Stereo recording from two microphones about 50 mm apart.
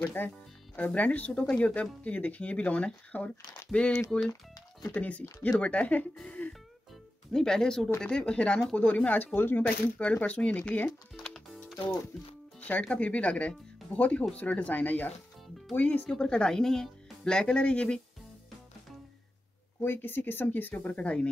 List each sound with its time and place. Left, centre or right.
0.0 s speech: left
0.7 s speech: left
4.9 s speech: left
6.2 s music: left
7.3 s speech: centre
8.7 s speech: left
11.1 s music: centre
12.5 s speech: left
16.1 s speech: centre
19.8 s speech: left